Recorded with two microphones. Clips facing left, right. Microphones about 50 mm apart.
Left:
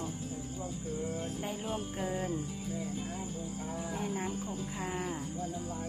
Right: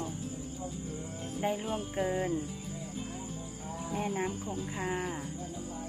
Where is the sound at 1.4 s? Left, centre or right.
Centre.